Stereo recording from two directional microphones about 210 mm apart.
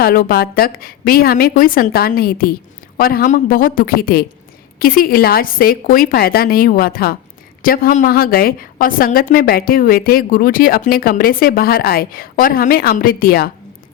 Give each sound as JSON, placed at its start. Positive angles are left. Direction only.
{"t": 0.0, "sound": "a woman's voice", "side_deg": 45}